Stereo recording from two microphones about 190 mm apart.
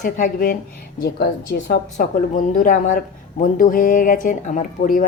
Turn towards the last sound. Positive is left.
turn(degrees=45)  # may be behind; listen again after turning